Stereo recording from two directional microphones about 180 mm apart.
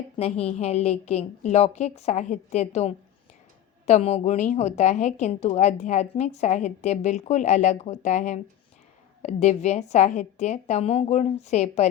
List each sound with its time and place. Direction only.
0.2 s a woman's voice: 35° left (ahead or behind)